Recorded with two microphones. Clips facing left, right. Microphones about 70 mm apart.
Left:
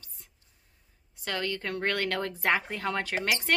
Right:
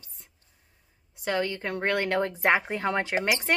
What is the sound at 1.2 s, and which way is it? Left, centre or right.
Speech, centre.